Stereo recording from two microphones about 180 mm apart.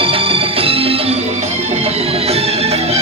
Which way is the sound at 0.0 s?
30° right (ahead or behind).